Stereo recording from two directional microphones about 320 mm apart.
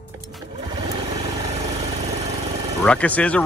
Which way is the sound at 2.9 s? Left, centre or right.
Centre.